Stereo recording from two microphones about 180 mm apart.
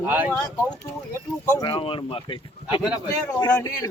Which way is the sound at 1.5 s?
25° left (ahead or behind).